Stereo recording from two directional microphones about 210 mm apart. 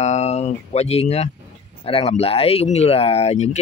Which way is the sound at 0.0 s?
30° left (ahead or behind).